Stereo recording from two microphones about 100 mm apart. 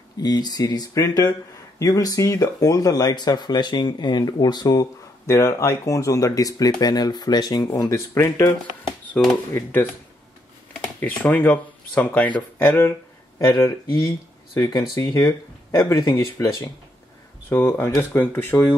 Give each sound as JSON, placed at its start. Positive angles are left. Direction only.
{"t": 0.2, "sound": "speech", "side_deg": 40}
{"t": 8.1, "sound": "speech", "side_deg": 30}
{"t": 11.0, "sound": "speech", "side_deg": 15}
{"t": 17.5, "sound": "speech", "side_deg": 20}